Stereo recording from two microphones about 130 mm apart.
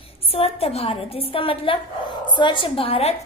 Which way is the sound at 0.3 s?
50° left (ahead or behind).